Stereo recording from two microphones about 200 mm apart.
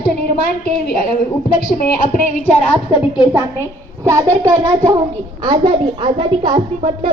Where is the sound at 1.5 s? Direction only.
45° left (ahead or behind).